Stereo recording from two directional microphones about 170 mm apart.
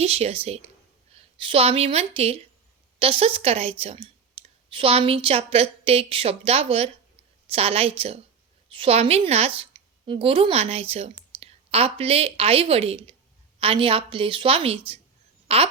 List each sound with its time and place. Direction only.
0.0 s a woman's voice: 35° right (ahead or behind)